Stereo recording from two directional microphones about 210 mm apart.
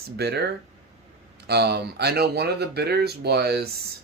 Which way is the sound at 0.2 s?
50° right (ahead or behind).